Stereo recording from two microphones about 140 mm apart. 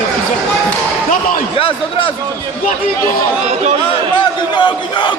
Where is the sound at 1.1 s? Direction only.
80° left.